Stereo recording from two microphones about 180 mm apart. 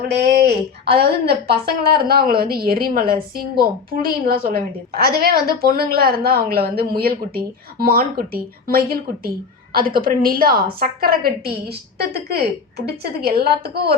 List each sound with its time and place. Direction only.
0.1 s a woman's voice: 65° right (ahead or behind)